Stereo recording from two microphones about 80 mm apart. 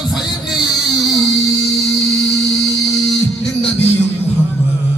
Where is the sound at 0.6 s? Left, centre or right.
Left.